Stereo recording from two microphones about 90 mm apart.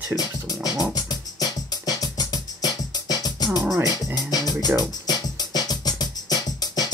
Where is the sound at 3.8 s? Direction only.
45° left (ahead or behind).